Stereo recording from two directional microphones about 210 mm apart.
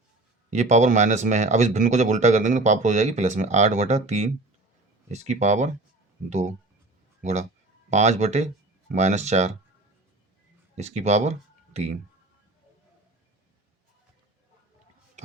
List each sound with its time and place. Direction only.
0.5 s speech: 35° right (ahead or behind)
7.2 s speech: 35° right (ahead or behind)
10.8 s speech: 30° right (ahead or behind)